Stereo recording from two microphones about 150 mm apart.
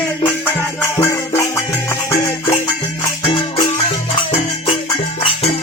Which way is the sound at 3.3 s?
35° left (ahead or behind).